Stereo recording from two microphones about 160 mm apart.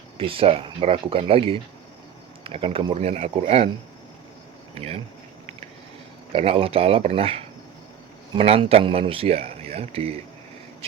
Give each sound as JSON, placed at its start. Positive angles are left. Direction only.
{"t": 0.2, "sound": "speech", "side_deg": -35}
{"t": 4.7, "sound": "speech", "side_deg": -40}
{"t": 6.3, "sound": "speech", "side_deg": -35}